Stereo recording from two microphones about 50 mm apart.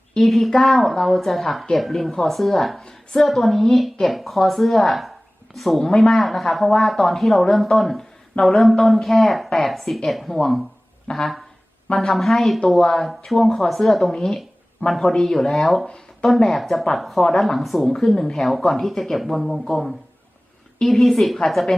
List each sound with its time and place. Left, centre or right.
0.2 s speech: centre
2.8 s a woman's voice: centre
3.2 s speech: centre
11.1 s a sound: left
11.9 s speech: centre